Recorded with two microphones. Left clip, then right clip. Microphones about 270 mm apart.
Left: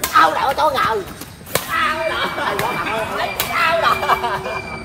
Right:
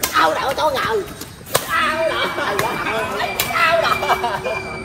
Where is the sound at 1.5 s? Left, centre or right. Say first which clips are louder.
Right 1 dB; centre.